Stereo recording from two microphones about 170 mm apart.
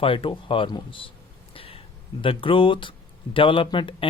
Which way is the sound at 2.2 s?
30° left (ahead or behind).